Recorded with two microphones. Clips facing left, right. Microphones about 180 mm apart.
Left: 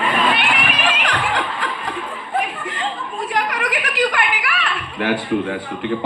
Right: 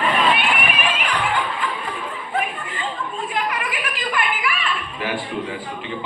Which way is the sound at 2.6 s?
75° left (ahead or behind).